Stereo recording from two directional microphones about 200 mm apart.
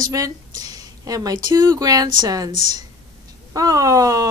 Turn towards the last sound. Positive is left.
turn(degrees=-15)  # may be behind; listen again after turning